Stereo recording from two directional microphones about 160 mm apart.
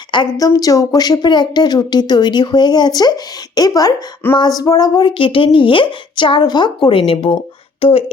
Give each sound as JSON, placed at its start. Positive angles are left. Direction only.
{"t": 0.1, "sound": "speech", "side_deg": 25}